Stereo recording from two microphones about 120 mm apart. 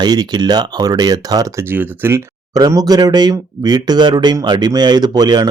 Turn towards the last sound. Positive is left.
turn(degrees=-35)  # may be behind; listen again after turning